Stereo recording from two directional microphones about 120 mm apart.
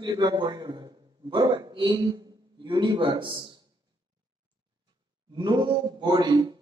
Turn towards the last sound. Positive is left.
turn(degrees=-35)  # may be behind; listen again after turning